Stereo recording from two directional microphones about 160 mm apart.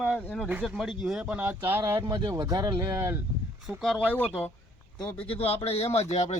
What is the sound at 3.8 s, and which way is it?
Speech, centre (ahead or behind).